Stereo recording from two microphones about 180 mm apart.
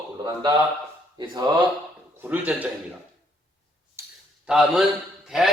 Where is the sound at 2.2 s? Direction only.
10° right (ahead or behind).